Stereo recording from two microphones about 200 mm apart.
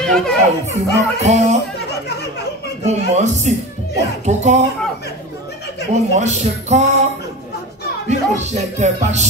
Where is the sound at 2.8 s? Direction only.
35° right (ahead or behind).